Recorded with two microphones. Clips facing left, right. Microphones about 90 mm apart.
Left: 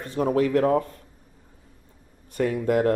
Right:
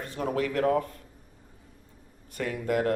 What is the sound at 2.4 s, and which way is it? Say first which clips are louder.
Speech: left 6 dB; 30° left (ahead or behind).